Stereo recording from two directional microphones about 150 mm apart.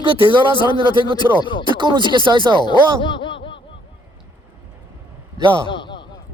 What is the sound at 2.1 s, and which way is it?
Speech, 35° right (ahead or behind).